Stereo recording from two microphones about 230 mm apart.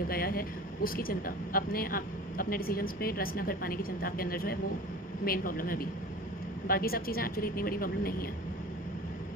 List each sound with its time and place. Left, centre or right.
0.1 s speech: left